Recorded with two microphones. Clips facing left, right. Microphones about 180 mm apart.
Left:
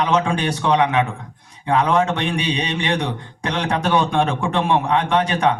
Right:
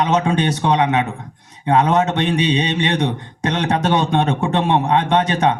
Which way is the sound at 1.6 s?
25° right (ahead or behind).